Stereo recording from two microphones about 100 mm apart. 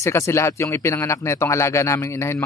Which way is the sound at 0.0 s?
25° left (ahead or behind).